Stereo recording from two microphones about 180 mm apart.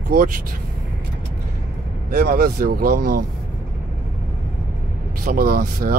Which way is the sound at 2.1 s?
55° right (ahead or behind).